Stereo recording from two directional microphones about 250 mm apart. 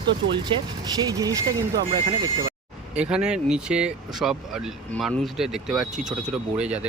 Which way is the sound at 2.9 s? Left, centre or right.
Centre.